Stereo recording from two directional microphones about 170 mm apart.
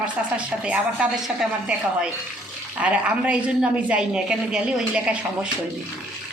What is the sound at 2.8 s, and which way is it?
A woman's voice, 5° right (ahead or behind).